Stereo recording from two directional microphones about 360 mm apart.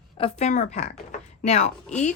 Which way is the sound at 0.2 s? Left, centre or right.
Centre.